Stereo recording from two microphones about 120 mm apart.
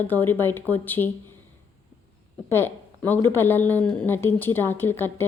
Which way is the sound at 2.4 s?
20° left (ahead or behind).